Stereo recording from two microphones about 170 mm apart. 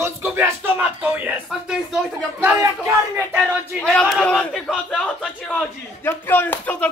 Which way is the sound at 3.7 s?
Centre (ahead or behind).